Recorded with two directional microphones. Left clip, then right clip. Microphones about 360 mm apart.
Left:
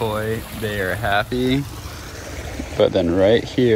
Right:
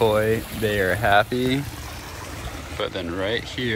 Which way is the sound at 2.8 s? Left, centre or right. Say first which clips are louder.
Left 11 dB; centre.